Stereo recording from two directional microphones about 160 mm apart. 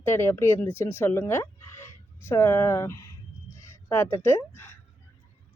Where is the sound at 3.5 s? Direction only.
15° left (ahead or behind).